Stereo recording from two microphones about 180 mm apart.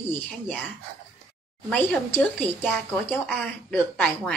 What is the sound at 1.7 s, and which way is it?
A woman's voice, 10° left (ahead or behind).